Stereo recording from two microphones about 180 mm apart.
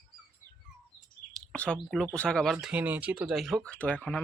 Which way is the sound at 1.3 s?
5° left (ahead or behind).